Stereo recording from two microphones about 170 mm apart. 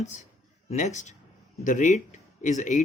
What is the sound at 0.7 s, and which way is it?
Speech, 40° left (ahead or behind).